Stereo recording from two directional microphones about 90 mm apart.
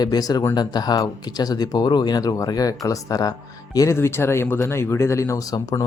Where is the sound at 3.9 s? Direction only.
25° left (ahead or behind); by 5.8 s 45° left (ahead or behind).